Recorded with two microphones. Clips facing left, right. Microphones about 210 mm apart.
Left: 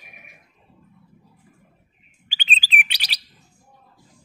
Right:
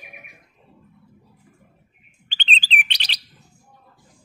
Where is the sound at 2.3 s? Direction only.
10° left (ahead or behind).